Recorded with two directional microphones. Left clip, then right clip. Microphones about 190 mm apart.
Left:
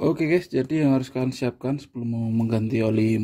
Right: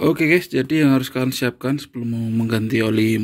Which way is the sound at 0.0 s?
5° left (ahead or behind).